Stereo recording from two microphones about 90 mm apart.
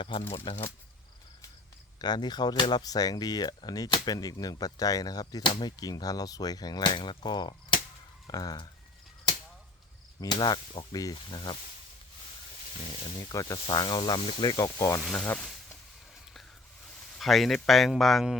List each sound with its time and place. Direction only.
0.0 s speech: 85° left
2.0 s speech: 50° left (ahead or behind)
10.2 s speech: 50° left (ahead or behind)
13.2 s speech: 40° left (ahead or behind)
15.0 s speech: 10° left (ahead or behind)
17.2 s speech: centre (ahead or behind)